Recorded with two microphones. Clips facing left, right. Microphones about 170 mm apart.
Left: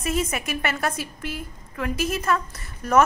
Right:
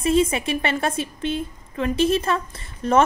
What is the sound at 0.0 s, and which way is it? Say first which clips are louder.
A woman's voice: right 7 dB; 25° right (ahead or behind).